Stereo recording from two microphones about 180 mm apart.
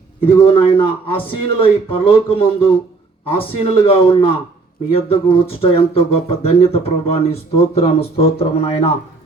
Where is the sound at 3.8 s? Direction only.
30° left (ahead or behind).